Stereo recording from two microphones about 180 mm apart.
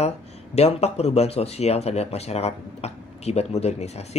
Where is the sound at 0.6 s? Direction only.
35° left (ahead or behind).